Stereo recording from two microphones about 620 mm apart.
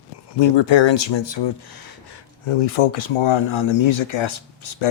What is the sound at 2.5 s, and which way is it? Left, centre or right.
Speech, left.